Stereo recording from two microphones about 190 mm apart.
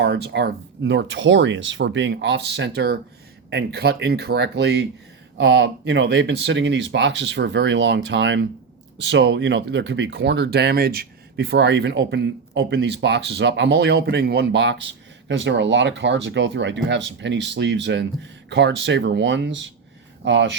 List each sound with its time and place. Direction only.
0.0 s speech: 60° right (ahead or behind)